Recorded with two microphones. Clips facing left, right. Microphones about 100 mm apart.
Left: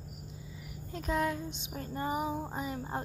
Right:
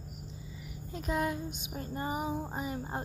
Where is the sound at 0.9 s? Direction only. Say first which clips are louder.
Left 1 dB; 5° right (ahead or behind).